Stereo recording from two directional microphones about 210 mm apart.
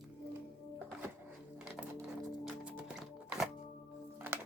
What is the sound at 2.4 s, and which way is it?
Music, 5° right (ahead or behind).